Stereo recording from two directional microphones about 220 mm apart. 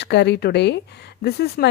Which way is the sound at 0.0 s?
50° left (ahead or behind).